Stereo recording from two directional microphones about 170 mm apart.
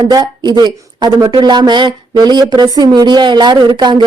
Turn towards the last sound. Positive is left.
turn(degrees=-25)  # may be behind; listen again after turning